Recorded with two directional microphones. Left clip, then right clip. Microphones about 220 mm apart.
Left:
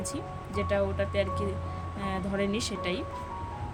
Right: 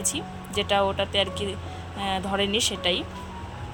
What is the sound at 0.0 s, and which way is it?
Speech, centre (ahead or behind).